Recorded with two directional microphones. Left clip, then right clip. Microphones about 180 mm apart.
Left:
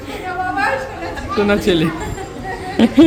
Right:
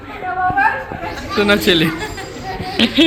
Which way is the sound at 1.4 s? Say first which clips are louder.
Right 2 dB; 5° left (ahead or behind).